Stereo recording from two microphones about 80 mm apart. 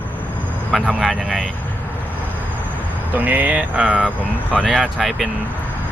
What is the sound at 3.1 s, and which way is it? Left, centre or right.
Speech, right.